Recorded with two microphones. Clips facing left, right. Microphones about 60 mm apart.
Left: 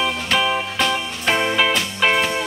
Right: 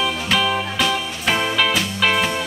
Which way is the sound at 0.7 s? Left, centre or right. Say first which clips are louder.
Even; centre.